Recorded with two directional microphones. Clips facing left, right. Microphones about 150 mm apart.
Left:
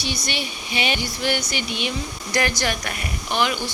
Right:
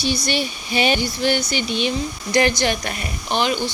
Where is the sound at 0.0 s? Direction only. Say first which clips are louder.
Right 6 dB; 35° right (ahead or behind).